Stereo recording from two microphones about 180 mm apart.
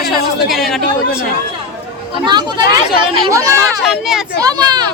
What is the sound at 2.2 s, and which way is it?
Speech, 25° right (ahead or behind).